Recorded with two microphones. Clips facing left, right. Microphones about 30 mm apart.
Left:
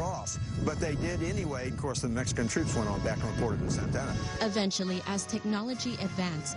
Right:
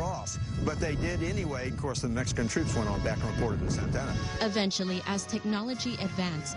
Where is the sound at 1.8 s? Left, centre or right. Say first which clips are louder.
Even; centre.